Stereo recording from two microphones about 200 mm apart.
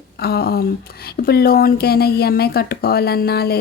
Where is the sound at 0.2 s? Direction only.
50° left (ahead or behind).